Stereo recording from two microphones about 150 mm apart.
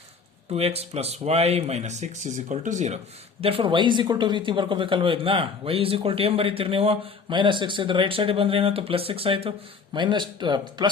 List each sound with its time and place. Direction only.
0.5 s speech: 45° right (ahead or behind)
3.4 s speech: 35° right (ahead or behind)